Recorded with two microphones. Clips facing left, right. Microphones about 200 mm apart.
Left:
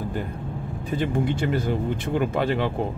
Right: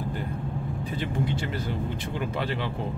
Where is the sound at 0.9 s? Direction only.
50° left (ahead or behind).